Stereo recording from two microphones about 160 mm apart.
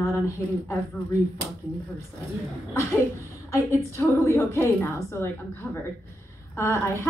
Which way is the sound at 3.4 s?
20° left (ahead or behind).